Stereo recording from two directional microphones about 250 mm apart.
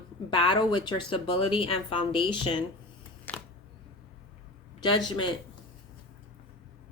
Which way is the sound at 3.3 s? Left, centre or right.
Centre.